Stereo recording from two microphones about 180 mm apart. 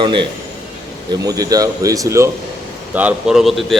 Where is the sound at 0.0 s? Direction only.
25° right (ahead or behind).